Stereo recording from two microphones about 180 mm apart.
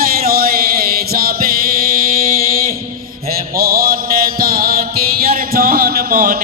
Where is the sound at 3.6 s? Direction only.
55° right (ahead or behind).